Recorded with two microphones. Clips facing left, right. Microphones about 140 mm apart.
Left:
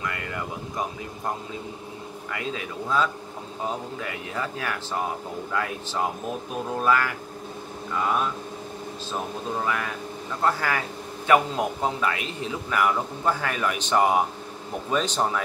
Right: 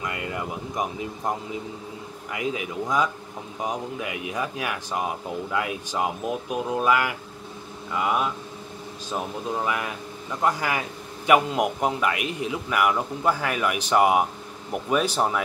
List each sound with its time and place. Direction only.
0.0 s a man's voice: 20° right (ahead or behind)
10.4 s a man's voice: 15° right (ahead or behind)